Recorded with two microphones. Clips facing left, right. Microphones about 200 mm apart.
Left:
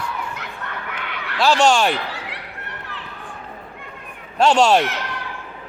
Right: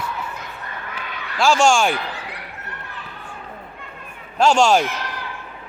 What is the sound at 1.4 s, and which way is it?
Speech, centre (ahead or behind).